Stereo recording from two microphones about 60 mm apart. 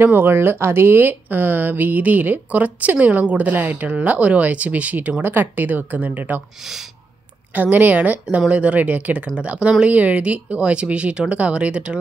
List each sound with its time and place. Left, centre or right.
0.0 s speech: right
5.2 s speech: right
6.6 s speech: centre
7.7 s speech: right